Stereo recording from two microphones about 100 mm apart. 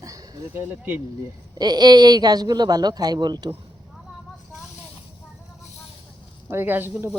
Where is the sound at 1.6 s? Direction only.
45° right (ahead or behind).